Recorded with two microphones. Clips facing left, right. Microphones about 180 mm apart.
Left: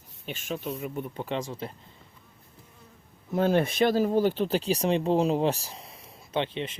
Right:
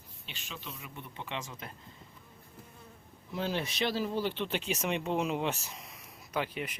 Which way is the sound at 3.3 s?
50° left (ahead or behind).